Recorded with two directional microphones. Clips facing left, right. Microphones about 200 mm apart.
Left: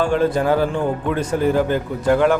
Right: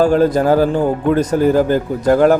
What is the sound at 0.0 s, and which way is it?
Speech, 40° right (ahead or behind).